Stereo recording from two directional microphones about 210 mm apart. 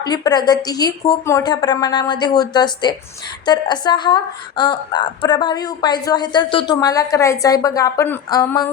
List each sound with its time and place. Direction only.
0.0 s a woman's voice: 20° left (ahead or behind)